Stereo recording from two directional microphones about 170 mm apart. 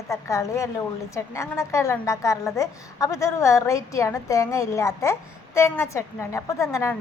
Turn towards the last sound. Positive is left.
turn(degrees=15)  # may be behind; listen again after turning